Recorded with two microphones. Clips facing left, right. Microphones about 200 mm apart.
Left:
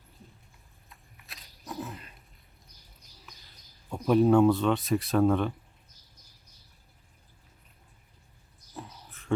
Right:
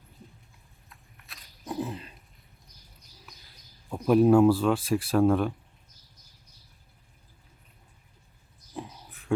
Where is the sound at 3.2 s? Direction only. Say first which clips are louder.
Even; centre (ahead or behind).